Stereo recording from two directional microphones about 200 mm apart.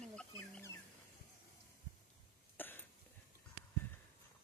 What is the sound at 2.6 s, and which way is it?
Cough, 10° left (ahead or behind).